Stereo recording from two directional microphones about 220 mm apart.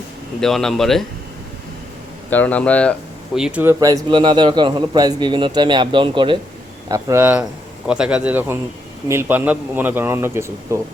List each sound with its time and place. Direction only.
0.3 s a man's voice: centre (ahead or behind)
2.3 s a man's voice: 5° left (ahead or behind)
3.3 s a man's voice: 5° right (ahead or behind)